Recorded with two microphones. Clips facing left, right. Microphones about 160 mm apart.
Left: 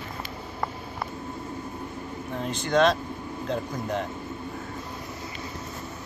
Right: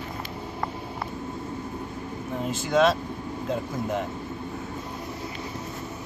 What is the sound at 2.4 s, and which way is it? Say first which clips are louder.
Speech: even; 5° right (ahead or behind).